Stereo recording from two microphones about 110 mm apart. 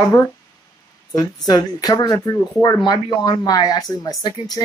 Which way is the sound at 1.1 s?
35° left (ahead or behind).